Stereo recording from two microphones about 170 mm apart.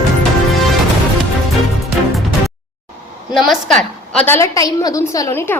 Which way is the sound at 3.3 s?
Centre (ahead or behind).